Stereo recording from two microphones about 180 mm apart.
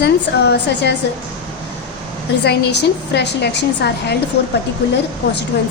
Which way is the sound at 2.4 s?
70° left (ahead or behind).